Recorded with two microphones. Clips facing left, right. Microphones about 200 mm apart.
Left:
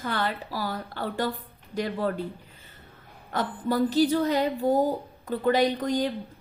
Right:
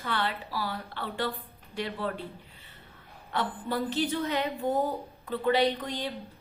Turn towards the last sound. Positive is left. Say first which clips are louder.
# left 4 dB
turn(degrees=45)  # may be behind; listen again after turning